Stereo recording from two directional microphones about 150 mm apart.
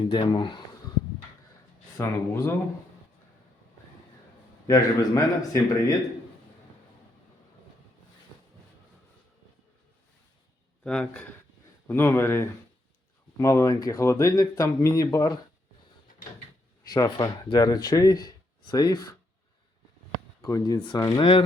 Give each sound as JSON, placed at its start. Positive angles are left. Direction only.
{"t": 0.0, "sound": "speech", "side_deg": 30}
{"t": 2.0, "sound": "speech", "side_deg": 15}
{"t": 4.6, "sound": "speech", "side_deg": 25}
{"t": 10.8, "sound": "speech", "side_deg": 5}
{"t": 16.9, "sound": "speech", "side_deg": 25}
{"t": 20.4, "sound": "speech", "side_deg": 25}